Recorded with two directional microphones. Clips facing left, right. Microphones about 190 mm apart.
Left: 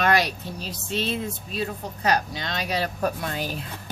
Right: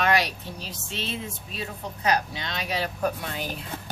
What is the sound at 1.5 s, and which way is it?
Speech, 35° left (ahead or behind).